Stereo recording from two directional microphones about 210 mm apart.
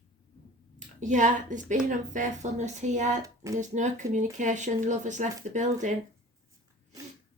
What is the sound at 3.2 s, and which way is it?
Speech, 15° right (ahead or behind).